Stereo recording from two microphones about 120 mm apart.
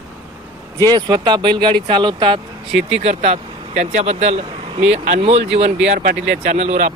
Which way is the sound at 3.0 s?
60° right (ahead or behind).